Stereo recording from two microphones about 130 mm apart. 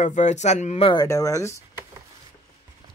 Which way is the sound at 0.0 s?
70° left (ahead or behind).